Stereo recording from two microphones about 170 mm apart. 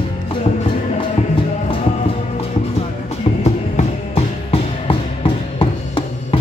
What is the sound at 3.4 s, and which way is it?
Music, 40° left (ahead or behind).